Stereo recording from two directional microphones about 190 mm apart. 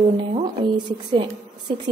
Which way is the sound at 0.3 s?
30° right (ahead or behind).